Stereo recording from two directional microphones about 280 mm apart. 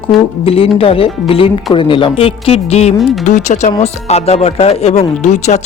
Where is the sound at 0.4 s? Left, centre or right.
Centre.